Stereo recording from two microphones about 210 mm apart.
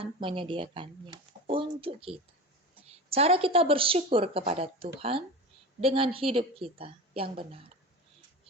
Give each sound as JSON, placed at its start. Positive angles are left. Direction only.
{"t": 0.0, "sound": "speech", "side_deg": -25}